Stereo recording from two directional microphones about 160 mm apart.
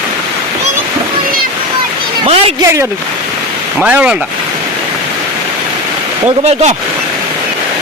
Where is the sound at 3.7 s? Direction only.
10° right (ahead or behind).